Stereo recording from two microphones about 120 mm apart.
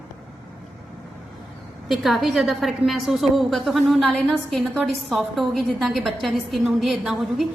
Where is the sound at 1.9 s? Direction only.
Centre (ahead or behind).